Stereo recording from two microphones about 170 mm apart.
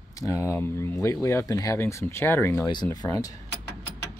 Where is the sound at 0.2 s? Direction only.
15° left (ahead or behind).